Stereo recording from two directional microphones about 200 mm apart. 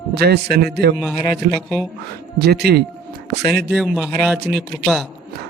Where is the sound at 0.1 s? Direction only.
55° right (ahead or behind).